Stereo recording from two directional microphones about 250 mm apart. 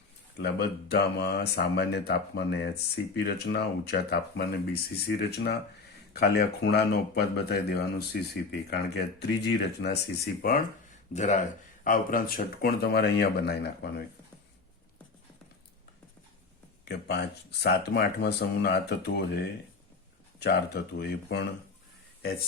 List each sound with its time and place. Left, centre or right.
0.3 s speech: left
16.8 s speech: left
20.4 s speech: left